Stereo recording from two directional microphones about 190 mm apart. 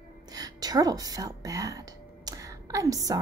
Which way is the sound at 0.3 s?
20° right (ahead or behind).